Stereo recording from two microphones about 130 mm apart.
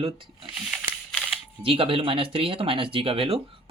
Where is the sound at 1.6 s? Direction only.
45° right (ahead or behind).